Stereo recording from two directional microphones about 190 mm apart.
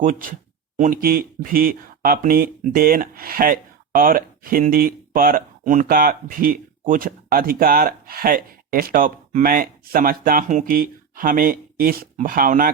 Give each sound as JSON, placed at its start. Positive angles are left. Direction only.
{"t": 0.0, "sound": "speech", "side_deg": -45}